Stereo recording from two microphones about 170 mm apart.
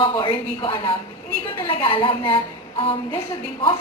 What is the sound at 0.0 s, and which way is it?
A woman's voice, 30° left (ahead or behind).